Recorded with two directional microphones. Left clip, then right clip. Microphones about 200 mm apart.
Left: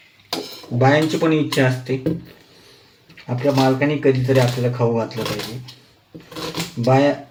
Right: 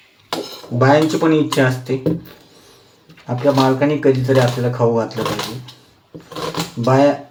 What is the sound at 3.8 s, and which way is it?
Speech, 15° left (ahead or behind).